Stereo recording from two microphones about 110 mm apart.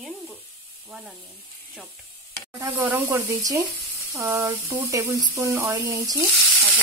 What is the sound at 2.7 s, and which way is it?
Speech, 15° right (ahead or behind).